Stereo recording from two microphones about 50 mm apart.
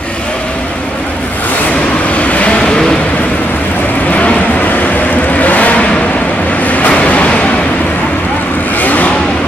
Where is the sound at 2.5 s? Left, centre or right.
Centre.